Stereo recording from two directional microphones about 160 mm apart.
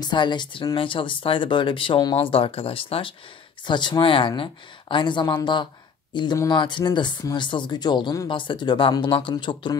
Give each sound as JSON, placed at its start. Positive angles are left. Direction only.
{"t": 0.0, "sound": "speech", "side_deg": 30}